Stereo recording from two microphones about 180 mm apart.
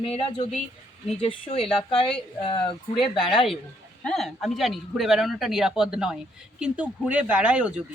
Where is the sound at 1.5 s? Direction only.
30° left (ahead or behind).